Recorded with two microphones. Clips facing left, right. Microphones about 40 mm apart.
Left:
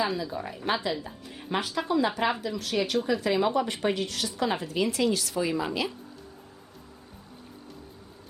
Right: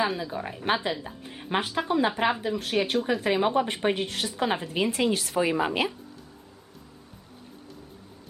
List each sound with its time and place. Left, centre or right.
0.2 s a woman's voice: right